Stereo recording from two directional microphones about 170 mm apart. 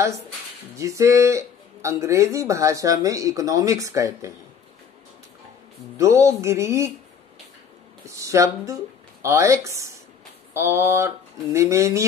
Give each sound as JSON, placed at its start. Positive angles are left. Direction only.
{"t": 0.7, "sound": "speech", "side_deg": -20}
{"t": 5.9, "sound": "speech", "side_deg": -15}
{"t": 8.0, "sound": "speech", "side_deg": -20}